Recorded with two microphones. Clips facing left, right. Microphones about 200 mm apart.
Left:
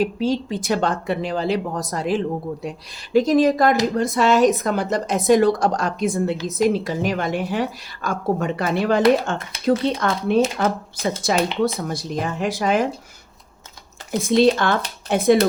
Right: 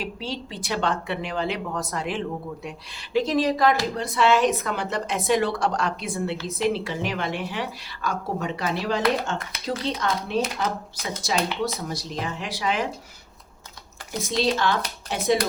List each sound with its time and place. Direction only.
0.0 s a woman's voice: 45° left (ahead or behind)
14.2 s a woman's voice: 55° left (ahead or behind)